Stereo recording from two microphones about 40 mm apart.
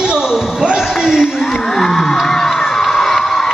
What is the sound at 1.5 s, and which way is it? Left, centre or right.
Crowd, centre.